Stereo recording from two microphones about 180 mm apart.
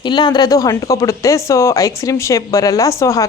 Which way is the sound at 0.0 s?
25° left (ahead or behind).